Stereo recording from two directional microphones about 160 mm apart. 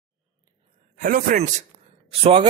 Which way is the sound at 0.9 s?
55° right (ahead or behind).